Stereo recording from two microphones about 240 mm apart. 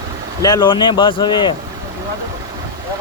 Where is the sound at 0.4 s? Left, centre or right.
Centre.